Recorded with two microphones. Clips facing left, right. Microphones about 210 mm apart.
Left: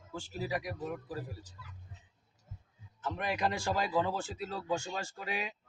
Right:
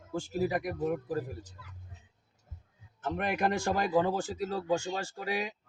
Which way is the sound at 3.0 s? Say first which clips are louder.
Right 3 dB; 55° right (ahead or behind).